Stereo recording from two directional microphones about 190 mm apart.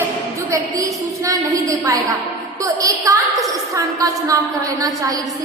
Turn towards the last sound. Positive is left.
turn(degrees=-20)  # may be behind; listen again after turning